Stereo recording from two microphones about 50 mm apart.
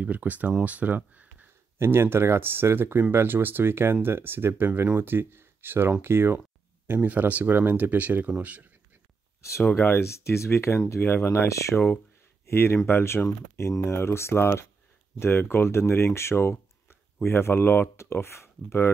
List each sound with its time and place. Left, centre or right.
0.0 s speech: right
1.8 s speech: right
6.9 s speech: right
9.8 s speech: left